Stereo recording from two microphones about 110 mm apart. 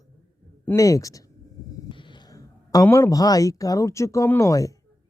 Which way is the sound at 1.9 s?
50° left (ahead or behind).